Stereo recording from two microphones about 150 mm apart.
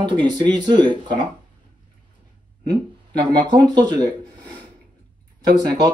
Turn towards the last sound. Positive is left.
turn(degrees=-25)  # may be behind; listen again after turning